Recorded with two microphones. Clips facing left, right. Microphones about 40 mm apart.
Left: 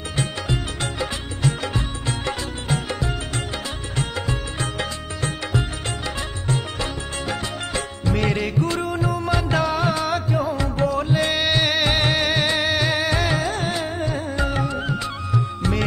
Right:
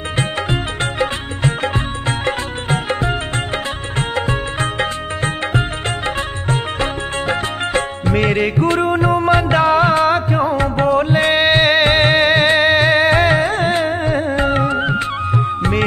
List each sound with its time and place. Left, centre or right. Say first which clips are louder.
0.2 s music: right 5 dB; right